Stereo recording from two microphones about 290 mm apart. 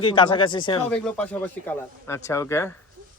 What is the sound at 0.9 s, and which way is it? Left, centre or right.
Speech, centre.